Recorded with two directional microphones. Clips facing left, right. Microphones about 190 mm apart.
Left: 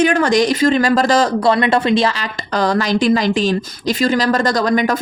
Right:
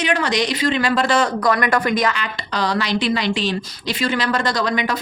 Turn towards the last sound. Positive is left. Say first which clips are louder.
# left 5 dB
turn(degrees=45)  # may be behind; listen again after turning